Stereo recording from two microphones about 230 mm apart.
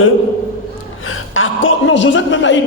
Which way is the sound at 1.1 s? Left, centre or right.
Left.